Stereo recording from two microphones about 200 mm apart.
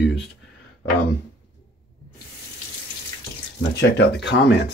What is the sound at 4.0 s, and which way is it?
Speech, 60° left (ahead or behind).